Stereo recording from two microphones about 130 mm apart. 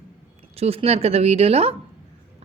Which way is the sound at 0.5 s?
50° right (ahead or behind).